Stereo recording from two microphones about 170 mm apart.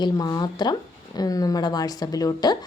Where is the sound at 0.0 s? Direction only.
25° left (ahead or behind).